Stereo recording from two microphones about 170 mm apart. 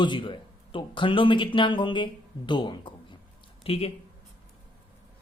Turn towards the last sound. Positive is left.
turn(degrees=35)  # may be behind; listen again after turning